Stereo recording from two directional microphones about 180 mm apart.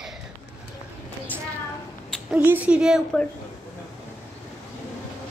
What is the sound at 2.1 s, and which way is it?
A woman's voice, 5° right (ahead or behind).